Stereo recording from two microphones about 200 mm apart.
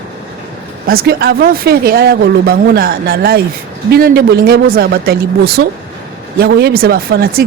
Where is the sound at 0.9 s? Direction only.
50° right (ahead or behind).